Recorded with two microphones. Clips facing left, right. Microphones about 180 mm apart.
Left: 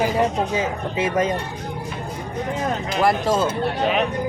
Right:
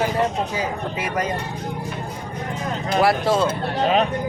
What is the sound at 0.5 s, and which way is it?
Speech, 25° left (ahead or behind).